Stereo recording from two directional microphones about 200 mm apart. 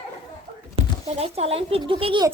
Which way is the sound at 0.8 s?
30° right (ahead or behind).